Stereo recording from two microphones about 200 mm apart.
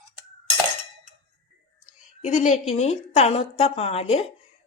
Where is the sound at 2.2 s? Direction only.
35° left (ahead or behind).